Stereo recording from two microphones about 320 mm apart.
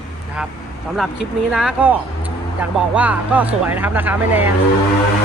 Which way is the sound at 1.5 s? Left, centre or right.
Centre.